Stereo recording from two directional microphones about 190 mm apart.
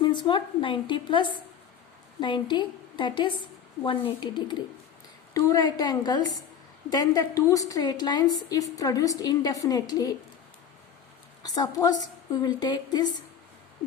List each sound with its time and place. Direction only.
0.0 s a woman's voice: 25° left (ahead or behind)
11.4 s a woman's voice: 20° left (ahead or behind)